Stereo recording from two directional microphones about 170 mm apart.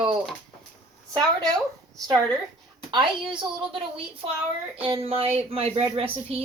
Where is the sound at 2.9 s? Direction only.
30° right (ahead or behind).